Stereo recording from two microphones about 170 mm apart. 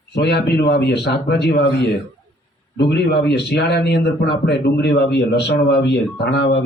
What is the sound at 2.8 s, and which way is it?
Speech, 80° left.